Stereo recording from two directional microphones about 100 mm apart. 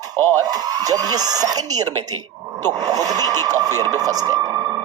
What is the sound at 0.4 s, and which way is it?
A man's voice, 40° right (ahead or behind).